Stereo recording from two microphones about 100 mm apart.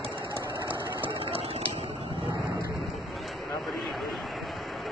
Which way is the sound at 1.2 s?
90° right.